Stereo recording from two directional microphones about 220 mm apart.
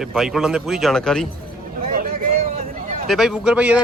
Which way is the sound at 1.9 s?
40° right (ahead or behind).